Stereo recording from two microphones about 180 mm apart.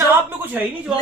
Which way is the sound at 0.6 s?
10° right (ahead or behind).